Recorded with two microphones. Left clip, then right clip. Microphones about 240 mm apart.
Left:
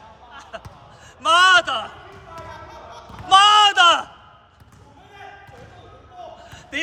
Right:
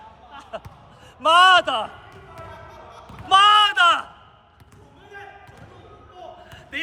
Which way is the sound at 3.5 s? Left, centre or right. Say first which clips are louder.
Left 2 dB; centre.